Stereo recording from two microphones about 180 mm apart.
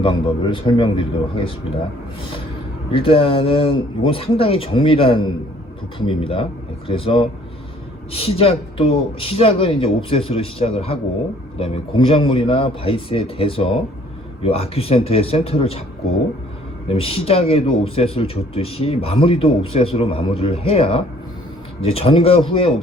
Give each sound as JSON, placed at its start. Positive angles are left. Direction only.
{"t": 0.0, "sound": "a man's voice", "side_deg": 25}
{"t": 2.9, "sound": "a man's voice", "side_deg": 30}
{"t": 16.9, "sound": "speech", "side_deg": 30}